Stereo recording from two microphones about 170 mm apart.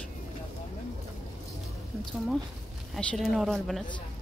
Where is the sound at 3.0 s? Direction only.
5° left (ahead or behind).